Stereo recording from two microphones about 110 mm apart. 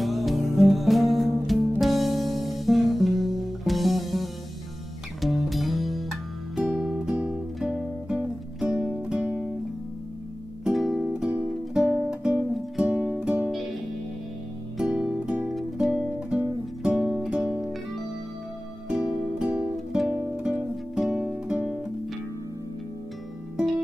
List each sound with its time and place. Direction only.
0.0 s music: centre (ahead or behind)
10.6 s music: centre (ahead or behind)
14.8 s music: 10° right (ahead or behind)
18.9 s music: 5° right (ahead or behind)